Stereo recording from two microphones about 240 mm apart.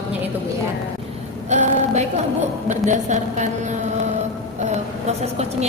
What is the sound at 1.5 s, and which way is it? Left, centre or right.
A woman's voice, right.